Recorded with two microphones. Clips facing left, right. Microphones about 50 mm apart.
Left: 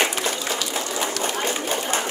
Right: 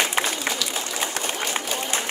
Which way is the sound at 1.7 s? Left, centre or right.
Left.